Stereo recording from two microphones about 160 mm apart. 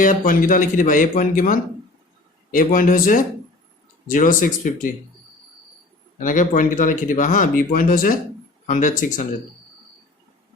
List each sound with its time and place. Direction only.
0.0 s speech: 55° left (ahead or behind)
6.1 s speech: 55° left (ahead or behind)